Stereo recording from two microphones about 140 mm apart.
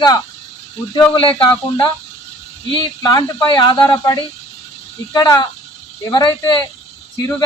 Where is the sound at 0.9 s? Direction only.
35° left (ahead or behind).